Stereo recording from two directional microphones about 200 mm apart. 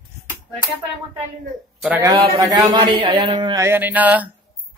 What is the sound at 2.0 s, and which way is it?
Speech, 20° right (ahead or behind).